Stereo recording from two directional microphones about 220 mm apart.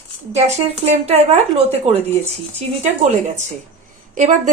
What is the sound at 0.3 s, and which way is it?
A woman's voice, 30° right (ahead or behind).